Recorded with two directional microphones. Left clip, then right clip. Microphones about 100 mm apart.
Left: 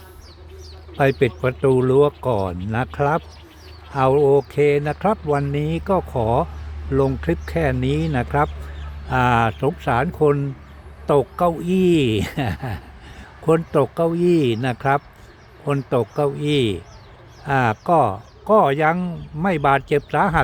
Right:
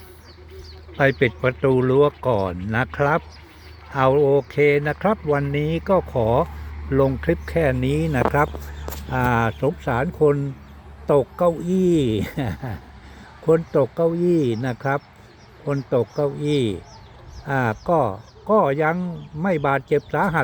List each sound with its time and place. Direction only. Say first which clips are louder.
0.9 s speech: left 1 dB; 40° left (ahead or behind)
13.4 s speech: even; 40° left (ahead or behind)